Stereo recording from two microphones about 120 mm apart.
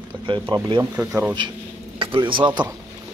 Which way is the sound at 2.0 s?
45° right (ahead or behind).